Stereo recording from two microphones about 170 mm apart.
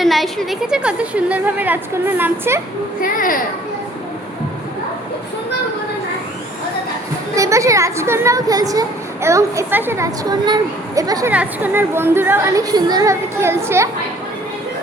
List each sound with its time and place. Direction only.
0.0 s a woman's voice: centre (ahead or behind)
3.0 s a child's voice: 55° left (ahead or behind)
7.3 s a woman's voice: 20° right (ahead or behind)
11.3 s a woman's voice: 10° right (ahead or behind)